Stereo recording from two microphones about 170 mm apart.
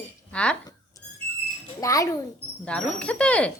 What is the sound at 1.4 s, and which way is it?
Speech, 20° left (ahead or behind).